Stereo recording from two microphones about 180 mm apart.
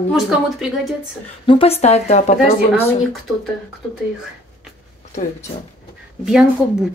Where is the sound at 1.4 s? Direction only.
30° left (ahead or behind).